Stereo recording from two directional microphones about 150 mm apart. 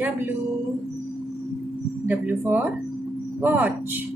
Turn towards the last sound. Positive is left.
turn(degrees=-10)  # may be behind; listen again after turning